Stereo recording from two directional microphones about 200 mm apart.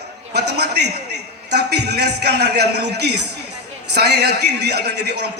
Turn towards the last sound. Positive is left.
turn(degrees=-55)  # may be behind; listen again after turning